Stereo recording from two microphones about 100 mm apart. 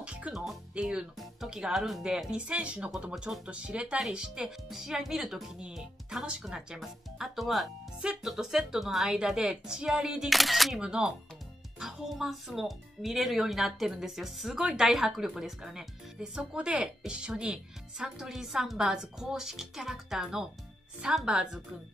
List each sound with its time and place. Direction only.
0.0 s music: 10° right (ahead or behind)
0.5 s speech: 10° right (ahead or behind)